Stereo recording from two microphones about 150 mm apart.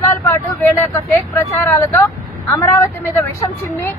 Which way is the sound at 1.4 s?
20° left (ahead or behind).